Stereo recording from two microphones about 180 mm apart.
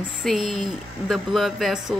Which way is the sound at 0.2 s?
Centre (ahead or behind).